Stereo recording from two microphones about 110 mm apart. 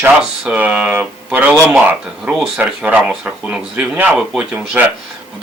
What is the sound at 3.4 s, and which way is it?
Speech, 10° right (ahead or behind).